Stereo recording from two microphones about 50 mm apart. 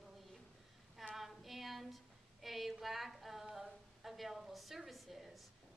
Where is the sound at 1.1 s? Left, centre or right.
Centre.